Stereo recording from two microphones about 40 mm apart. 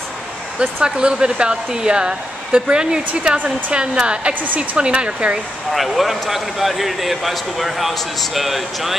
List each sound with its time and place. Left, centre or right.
0.6 s speech: right
5.7 s speech: centre